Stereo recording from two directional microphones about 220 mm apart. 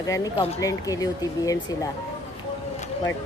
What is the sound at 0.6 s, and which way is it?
A woman's voice, 15° left (ahead or behind).